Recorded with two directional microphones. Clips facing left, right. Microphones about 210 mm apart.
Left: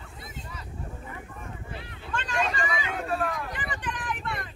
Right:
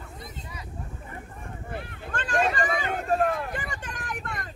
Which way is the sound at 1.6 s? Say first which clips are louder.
Right 4 dB; 55° right (ahead or behind).